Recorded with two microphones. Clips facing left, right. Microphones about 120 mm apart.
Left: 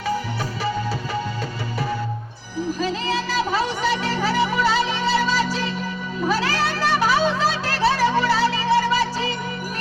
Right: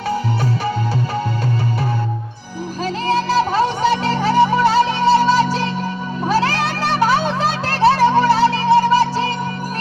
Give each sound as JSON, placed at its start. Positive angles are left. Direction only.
{"t": 2.8, "sound": "music", "side_deg": -50}
{"t": 5.0, "sound": "music", "side_deg": -30}
{"t": 5.3, "sound": "a sound", "side_deg": -50}
{"t": 6.2, "sound": "music", "side_deg": -50}